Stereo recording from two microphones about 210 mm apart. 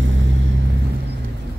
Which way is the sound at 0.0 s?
60° right (ahead or behind).